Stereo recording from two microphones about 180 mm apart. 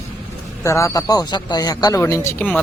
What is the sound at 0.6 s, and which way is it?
A man's voice, 15° left (ahead or behind).